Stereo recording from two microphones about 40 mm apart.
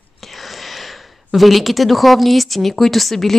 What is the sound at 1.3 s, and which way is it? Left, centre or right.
Speech, centre.